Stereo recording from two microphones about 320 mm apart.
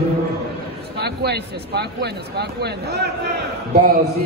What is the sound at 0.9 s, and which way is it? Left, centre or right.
Speech, right.